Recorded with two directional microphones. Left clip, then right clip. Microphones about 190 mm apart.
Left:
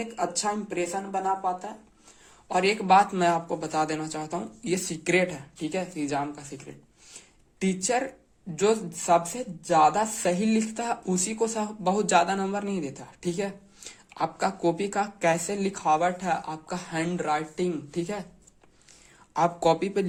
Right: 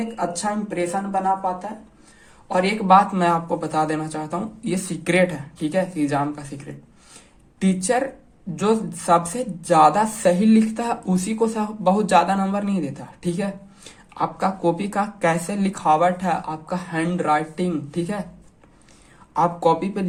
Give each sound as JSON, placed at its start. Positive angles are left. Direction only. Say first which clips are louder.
{"t": 0.2, "sound": "a woman's voice", "louder": "right 3 dB", "side_deg": 25}
{"t": 19.3, "sound": "speech", "louder": "right 4 dB", "side_deg": 25}